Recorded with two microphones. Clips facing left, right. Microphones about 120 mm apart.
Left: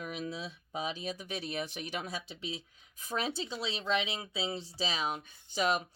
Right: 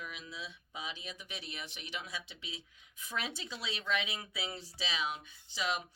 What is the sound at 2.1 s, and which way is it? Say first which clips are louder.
Speech: left 6 dB; 30° left (ahead or behind).